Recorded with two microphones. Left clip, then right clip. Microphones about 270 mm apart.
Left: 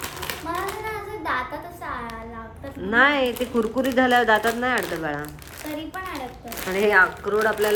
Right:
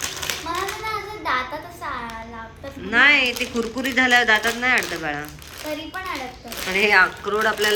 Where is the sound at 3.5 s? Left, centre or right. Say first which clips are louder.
Left 2 dB; centre.